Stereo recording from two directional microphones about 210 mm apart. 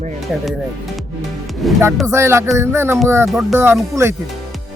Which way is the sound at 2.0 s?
10° right (ahead or behind).